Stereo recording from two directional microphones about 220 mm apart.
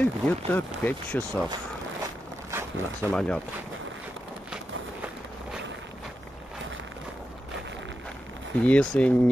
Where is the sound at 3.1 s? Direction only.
5° left (ahead or behind).